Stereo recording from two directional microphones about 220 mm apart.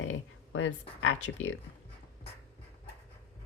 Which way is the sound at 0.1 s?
60° left (ahead or behind).